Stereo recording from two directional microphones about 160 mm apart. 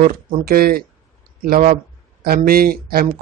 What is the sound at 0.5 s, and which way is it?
Speech, 70° right (ahead or behind).